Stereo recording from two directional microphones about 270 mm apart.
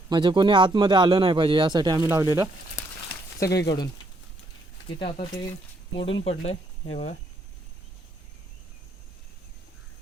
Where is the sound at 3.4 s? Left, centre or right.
Left.